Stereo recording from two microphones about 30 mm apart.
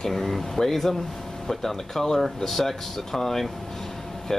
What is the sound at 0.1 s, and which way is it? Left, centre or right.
Speech, centre.